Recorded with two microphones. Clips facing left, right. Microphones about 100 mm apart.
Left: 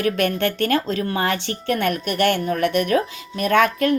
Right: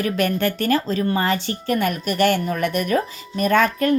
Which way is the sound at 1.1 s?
65° left (ahead or behind).